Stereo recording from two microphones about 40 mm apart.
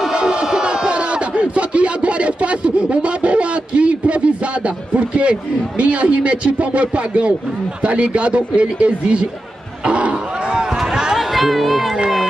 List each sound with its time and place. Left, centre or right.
0.1 s a sound: right
4.6 s a man's voice: right
11.1 s speech: centre